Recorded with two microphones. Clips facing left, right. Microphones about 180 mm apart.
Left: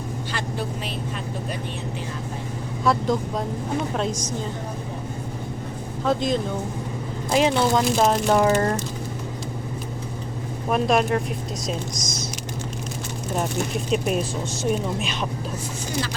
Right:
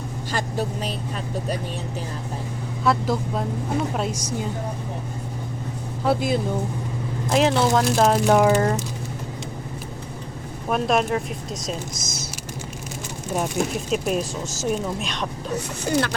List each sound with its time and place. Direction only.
0.3 s a woman's voice: 45° right (ahead or behind)
2.8 s speech: centre (ahead or behind)
6.1 s speech: 10° right (ahead or behind)
10.7 s speech: centre (ahead or behind)
13.3 s speech: centre (ahead or behind)
15.5 s speech: 65° right (ahead or behind)